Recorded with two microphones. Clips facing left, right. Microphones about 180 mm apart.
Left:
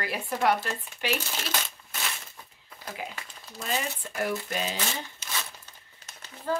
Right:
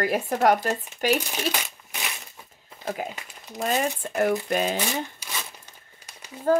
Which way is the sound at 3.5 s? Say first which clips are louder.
Right 7 dB; 50° right (ahead or behind).